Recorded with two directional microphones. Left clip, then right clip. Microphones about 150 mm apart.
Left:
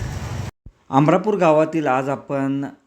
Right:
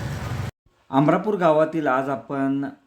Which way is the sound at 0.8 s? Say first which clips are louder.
Left 3 dB; 20° left (ahead or behind).